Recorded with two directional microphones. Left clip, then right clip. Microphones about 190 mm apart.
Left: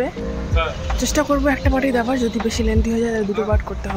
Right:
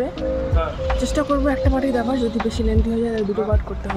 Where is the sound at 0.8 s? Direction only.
5° left (ahead or behind).